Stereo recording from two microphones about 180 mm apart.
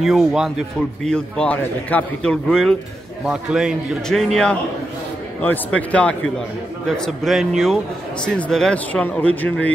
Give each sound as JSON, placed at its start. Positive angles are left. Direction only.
{"t": 0.0, "sound": "a man's voice", "side_deg": 0}